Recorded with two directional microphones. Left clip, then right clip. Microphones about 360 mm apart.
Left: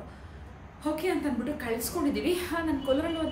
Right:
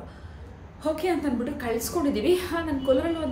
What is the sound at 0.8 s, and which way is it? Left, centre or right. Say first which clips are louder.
A woman's voice: right 3 dB; centre.